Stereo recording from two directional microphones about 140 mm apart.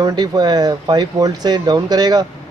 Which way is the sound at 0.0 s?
30° right (ahead or behind).